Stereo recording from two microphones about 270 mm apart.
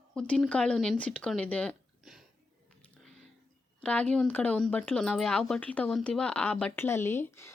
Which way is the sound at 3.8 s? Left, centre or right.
Centre.